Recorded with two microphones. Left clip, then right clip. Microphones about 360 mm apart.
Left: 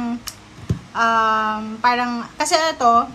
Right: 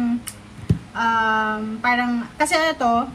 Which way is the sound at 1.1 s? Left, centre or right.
Left.